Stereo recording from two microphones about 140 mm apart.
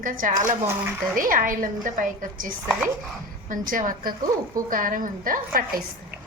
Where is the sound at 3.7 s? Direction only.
75° right (ahead or behind).